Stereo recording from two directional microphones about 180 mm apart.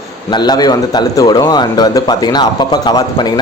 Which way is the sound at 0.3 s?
25° left (ahead or behind).